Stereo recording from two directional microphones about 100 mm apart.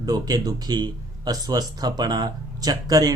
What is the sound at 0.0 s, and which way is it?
Speech, 45° right (ahead or behind).